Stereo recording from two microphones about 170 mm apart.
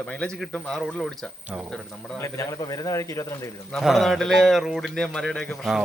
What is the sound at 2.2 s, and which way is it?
A man's voice, 15° left (ahead or behind).